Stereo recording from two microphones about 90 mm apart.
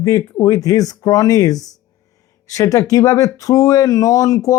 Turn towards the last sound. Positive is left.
turn(degrees=40)  # may be behind; listen again after turning